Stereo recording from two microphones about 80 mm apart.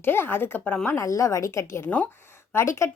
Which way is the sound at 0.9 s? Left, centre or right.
Left.